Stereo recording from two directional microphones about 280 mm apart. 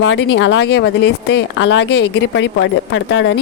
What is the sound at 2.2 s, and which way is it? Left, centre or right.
A woman's voice, left.